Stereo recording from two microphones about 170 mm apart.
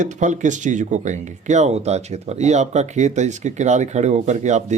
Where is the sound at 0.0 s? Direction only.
45° right (ahead or behind).